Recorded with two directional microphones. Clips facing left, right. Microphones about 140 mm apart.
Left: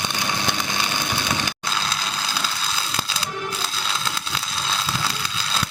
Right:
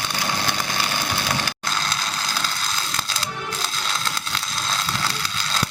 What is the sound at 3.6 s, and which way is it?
Music, 5° left (ahead or behind).